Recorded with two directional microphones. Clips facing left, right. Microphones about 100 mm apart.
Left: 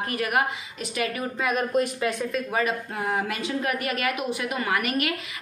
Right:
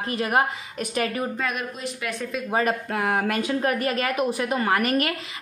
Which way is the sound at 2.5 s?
40° right (ahead or behind).